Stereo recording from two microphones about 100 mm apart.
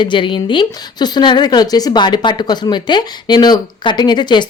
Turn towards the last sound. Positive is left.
turn(degrees=50)  # may be behind; listen again after turning